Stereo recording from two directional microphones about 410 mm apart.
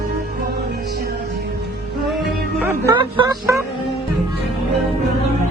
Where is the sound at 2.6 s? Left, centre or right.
Centre.